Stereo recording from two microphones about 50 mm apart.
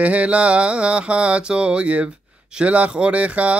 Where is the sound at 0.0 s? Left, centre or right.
Right.